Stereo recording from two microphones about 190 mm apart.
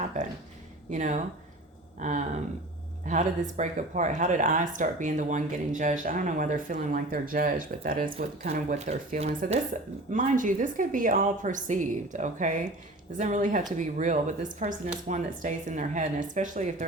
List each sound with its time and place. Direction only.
0.9 s speech: 40° right (ahead or behind)